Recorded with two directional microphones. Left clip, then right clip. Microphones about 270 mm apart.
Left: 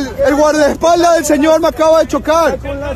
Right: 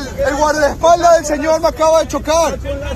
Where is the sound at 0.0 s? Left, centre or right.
Left.